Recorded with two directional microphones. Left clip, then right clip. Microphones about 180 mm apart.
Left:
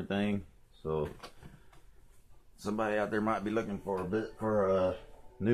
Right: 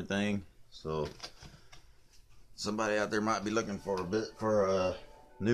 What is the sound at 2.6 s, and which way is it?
Speech, centre (ahead or behind).